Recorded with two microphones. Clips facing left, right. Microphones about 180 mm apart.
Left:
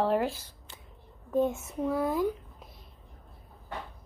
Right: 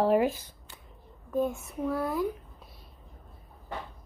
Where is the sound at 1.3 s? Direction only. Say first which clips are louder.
Left 2 dB; 20° left (ahead or behind).